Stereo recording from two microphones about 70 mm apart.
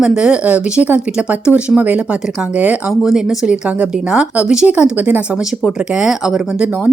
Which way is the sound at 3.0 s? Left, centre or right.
Centre.